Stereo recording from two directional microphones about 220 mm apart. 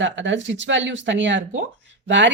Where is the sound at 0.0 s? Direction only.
55° right (ahead or behind).